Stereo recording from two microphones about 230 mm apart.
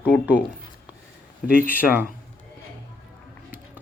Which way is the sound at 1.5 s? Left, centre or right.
Left.